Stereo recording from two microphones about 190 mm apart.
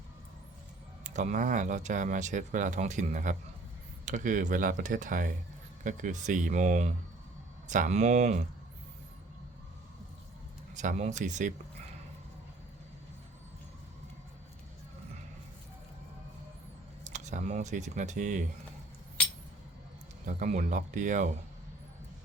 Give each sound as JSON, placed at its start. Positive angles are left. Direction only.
{"t": 1.0, "sound": "speech", "side_deg": -40}
{"t": 10.8, "sound": "speech", "side_deg": -35}
{"t": 17.0, "sound": "speech", "side_deg": -40}
{"t": 20.2, "sound": "speech", "side_deg": -40}